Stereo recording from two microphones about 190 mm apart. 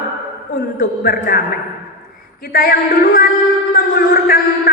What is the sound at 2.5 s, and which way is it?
A man's voice, 50° left (ahead or behind).